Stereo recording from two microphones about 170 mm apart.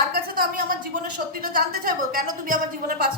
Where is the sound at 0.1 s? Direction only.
60° right (ahead or behind).